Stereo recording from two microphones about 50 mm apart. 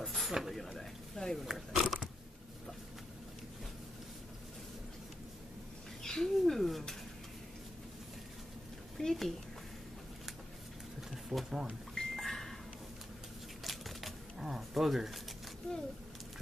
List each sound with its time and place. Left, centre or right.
0.0 s a sound: centre
0.3 s speech: centre
0.7 s speech: centre
1.4 s speech: centre
6.0 s speech: centre
8.9 s a woman's voice: centre
11.2 s speech: centre
11.9 s a sound: centre
13.7 s typewriter: centre